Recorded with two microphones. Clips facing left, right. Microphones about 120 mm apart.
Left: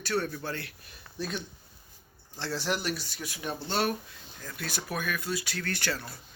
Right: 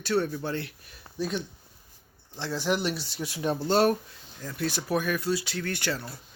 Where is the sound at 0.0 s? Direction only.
25° right (ahead or behind).